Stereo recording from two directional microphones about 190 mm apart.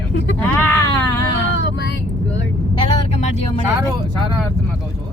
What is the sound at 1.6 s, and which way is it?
Vehicle, 65° left (ahead or behind).